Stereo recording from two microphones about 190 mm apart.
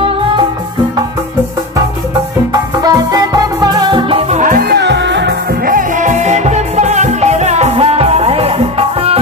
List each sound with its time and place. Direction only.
2.5 s music: 20° right (ahead or behind); by 5.3 s 65° right (ahead or behind)
5.7 s music: 45° right (ahead or behind)